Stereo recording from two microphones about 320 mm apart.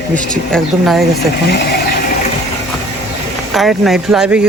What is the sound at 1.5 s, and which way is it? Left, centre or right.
Vehicle, left.